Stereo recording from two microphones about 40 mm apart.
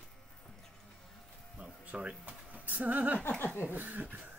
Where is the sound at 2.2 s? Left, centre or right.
Right.